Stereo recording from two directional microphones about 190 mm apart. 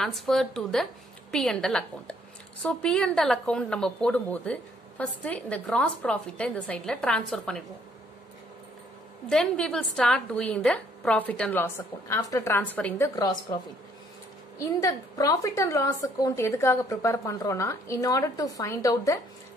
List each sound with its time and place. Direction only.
0.0 s speech: centre (ahead or behind)
9.3 s a woman's voice: 5° left (ahead or behind); by 13.6 s 20° left (ahead or behind)
14.6 s a woman's voice: 15° left (ahead or behind)